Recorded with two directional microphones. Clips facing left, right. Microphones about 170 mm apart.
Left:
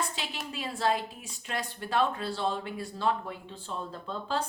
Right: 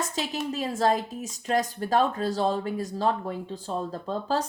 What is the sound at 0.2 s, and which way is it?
Speech, 40° right (ahead or behind).